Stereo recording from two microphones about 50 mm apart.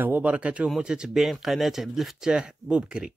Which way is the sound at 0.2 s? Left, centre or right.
Right.